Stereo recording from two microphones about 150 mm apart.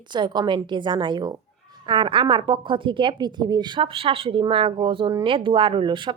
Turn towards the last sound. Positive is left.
turn(degrees=-35)  # may be behind; listen again after turning